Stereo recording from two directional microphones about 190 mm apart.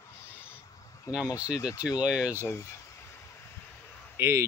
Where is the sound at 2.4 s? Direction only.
15° left (ahead or behind).